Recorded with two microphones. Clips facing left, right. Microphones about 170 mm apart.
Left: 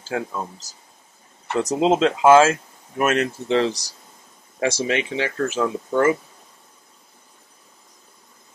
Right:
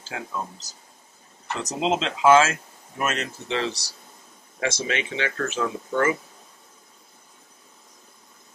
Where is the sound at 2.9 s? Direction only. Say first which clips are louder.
Left 7 dB; 50° left (ahead or behind).